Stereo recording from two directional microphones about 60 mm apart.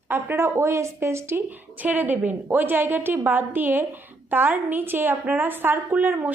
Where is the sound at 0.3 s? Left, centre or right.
Right.